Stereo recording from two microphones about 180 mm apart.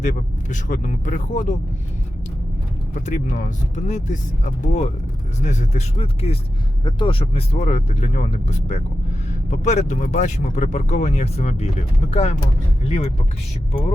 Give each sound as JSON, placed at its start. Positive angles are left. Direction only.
{"t": 0.0, "sound": "speech", "side_deg": 45}
{"t": 2.9, "sound": "speech", "side_deg": 45}